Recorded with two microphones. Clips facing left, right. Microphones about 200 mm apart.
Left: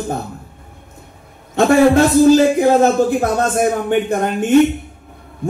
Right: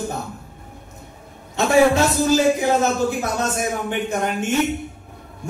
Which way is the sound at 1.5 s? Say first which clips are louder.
Left 5 dB; 55° left (ahead or behind).